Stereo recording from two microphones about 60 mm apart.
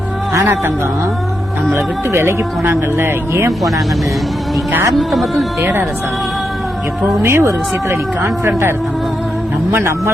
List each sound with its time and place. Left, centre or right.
1.7 s speech: right
4.9 s speech: centre
7.2 s speech: right